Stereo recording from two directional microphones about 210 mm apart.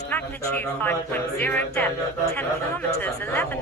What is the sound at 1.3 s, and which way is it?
Speech, 10° left (ahead or behind).